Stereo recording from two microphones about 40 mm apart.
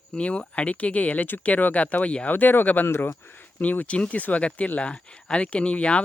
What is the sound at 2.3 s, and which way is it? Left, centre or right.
Speech, left.